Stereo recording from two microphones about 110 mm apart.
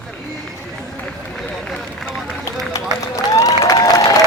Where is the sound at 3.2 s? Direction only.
30° left (ahead or behind).